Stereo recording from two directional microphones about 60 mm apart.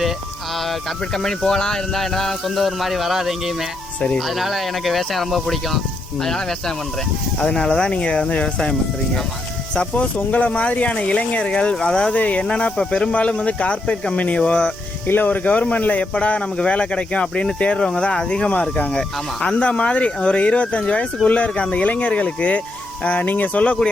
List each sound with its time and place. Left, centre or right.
0.7 s speech: centre
9.7 s speech: centre
12.1 s speech: left
15.0 s speech: left